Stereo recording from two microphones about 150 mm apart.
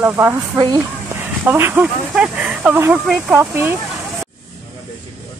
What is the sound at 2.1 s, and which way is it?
Speech, 5° right (ahead or behind).